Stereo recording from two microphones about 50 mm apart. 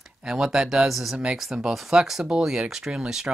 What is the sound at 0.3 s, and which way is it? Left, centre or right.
Speech, centre.